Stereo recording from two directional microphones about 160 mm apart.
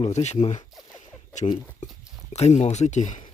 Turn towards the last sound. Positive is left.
turn(degrees=50)  # may be behind; listen again after turning